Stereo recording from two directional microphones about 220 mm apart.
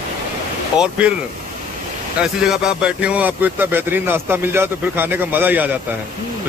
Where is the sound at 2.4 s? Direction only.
5° right (ahead or behind).